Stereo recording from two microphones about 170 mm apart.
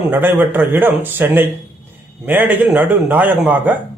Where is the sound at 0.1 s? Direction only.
10° right (ahead or behind).